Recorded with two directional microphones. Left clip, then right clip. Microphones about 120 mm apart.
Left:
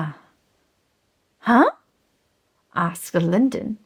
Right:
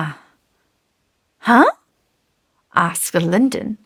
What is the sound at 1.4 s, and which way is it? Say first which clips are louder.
A woman's voice: right 4 dB; 45° right (ahead or behind).